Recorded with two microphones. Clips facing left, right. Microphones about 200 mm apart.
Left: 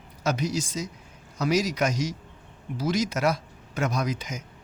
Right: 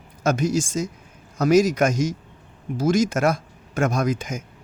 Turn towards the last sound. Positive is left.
turn(degrees=-50)  # may be behind; listen again after turning